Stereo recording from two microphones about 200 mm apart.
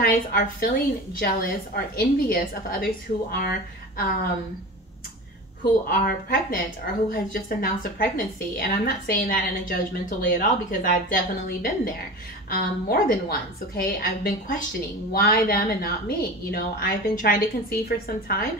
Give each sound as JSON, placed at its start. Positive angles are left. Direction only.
{"t": 0.3, "sound": "a woman's voice", "side_deg": 50}
{"t": 5.9, "sound": "a woman's voice", "side_deg": 45}